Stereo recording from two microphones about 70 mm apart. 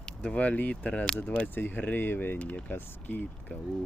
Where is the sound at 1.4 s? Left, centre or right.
Left.